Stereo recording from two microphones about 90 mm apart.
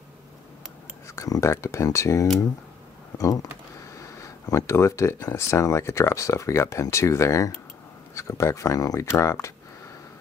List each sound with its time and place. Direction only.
1.0 s speech: 35° left (ahead or behind)
4.2 s speech: 35° left (ahead or behind)